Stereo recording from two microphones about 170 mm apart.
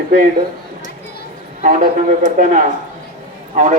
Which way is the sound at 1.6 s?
50° right (ahead or behind).